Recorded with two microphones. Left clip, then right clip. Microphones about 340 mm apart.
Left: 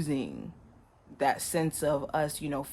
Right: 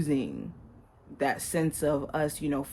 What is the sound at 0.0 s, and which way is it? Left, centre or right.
Speech, left.